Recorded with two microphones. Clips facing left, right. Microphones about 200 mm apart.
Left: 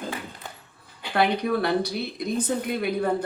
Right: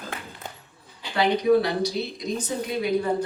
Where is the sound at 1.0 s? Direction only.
55° left (ahead or behind).